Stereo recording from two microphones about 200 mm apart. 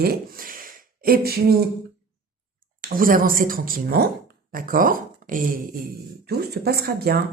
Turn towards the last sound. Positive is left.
turn(degrees=-50)  # may be behind; listen again after turning